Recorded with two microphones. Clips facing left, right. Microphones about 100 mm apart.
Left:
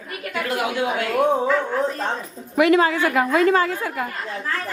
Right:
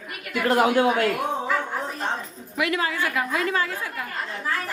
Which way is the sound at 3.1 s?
45° left (ahead or behind).